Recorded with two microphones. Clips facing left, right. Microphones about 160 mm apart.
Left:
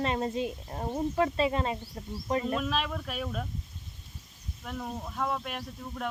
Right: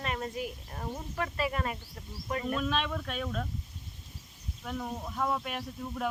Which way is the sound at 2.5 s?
5° left (ahead or behind).